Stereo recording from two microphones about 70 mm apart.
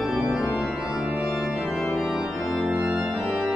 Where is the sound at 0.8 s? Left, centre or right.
Centre.